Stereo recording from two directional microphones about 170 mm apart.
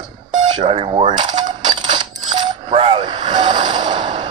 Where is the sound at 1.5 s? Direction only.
25° right (ahead or behind).